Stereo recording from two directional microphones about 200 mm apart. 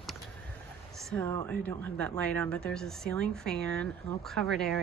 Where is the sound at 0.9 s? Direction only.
5° left (ahead or behind).